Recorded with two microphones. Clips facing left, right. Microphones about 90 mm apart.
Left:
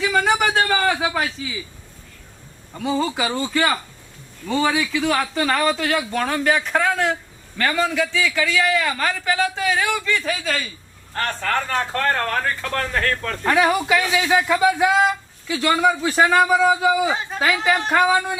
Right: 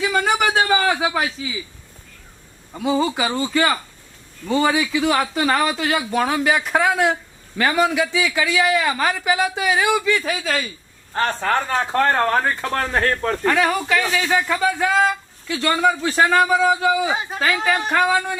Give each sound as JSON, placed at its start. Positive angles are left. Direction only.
{"t": 0.0, "sound": "speech", "side_deg": 0}
{"t": 2.7, "sound": "a man's voice", "side_deg": -5}
{"t": 11.1, "sound": "speech", "side_deg": -20}
{"t": 13.4, "sound": "speech", "side_deg": 10}